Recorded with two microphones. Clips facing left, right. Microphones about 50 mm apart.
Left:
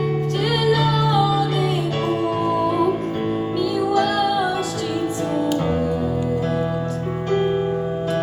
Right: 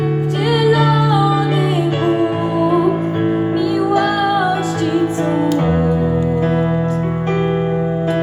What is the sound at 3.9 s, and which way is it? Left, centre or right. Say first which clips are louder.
Music: right 4 dB; right.